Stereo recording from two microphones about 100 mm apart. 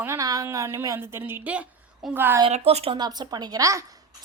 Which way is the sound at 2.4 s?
85° right.